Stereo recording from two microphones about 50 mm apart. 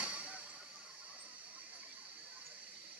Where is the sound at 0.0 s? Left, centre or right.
Right.